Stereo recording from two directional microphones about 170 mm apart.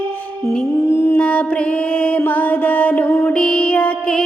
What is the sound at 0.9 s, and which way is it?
Mantra, 15° left (ahead or behind).